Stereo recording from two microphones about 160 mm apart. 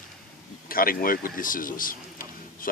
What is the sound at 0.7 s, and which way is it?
Speech, 65° left (ahead or behind).